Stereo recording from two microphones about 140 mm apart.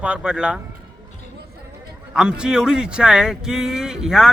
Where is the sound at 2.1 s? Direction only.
5° right (ahead or behind).